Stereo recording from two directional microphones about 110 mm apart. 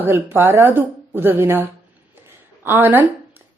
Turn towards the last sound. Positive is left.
turn(degrees=-15)  # may be behind; listen again after turning